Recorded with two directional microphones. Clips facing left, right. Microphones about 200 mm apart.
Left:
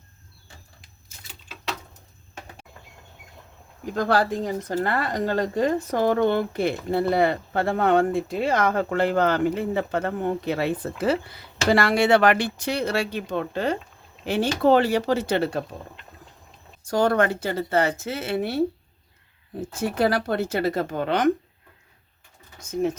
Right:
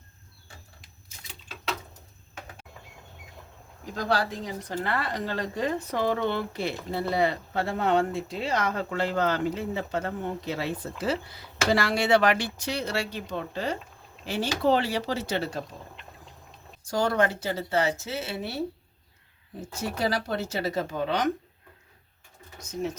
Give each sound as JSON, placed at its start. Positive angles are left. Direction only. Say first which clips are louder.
{"t": 3.9, "sound": "a woman's voice", "louder": "left 6 dB", "side_deg": 55}
{"t": 16.9, "sound": "a woman's voice", "louder": "left 4 dB", "side_deg": 55}
{"t": 19.7, "sound": "a woman's voice", "louder": "left 6 dB", "side_deg": 55}